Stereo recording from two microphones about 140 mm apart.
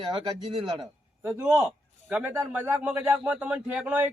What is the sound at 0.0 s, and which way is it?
Speech, 35° right (ahead or behind).